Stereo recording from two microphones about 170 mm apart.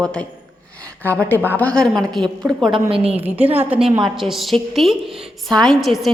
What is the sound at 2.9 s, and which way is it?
Speech, 35° right (ahead or behind).